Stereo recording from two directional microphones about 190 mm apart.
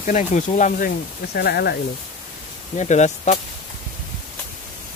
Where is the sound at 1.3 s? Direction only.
55° left (ahead or behind).